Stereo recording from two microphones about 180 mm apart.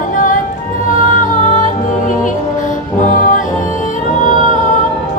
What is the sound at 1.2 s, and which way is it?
Music, 45° left (ahead or behind).